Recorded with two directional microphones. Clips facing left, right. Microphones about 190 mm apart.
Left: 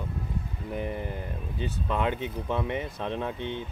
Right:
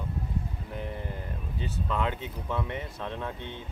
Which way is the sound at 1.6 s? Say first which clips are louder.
Left 2 dB; 20° left (ahead or behind).